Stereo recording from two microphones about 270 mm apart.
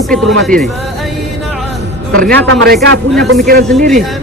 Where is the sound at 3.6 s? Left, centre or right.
Centre.